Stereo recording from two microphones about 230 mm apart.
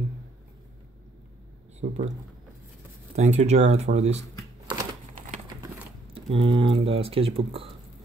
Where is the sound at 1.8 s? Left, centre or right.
Right.